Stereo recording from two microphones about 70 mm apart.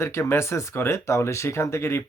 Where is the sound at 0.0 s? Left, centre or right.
Left.